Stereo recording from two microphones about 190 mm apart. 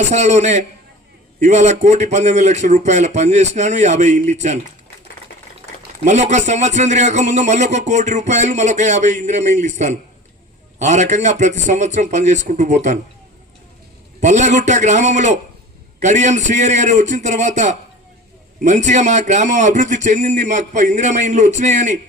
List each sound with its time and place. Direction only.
0.1 s speech: 35° right (ahead or behind)
6.1 s speech: 35° right (ahead or behind)
14.2 s speech: 40° right (ahead or behind)